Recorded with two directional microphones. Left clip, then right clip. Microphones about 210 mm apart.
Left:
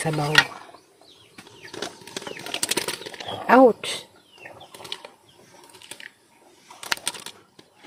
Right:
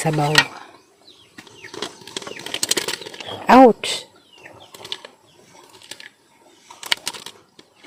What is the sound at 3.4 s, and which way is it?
Speech, 25° right (ahead or behind).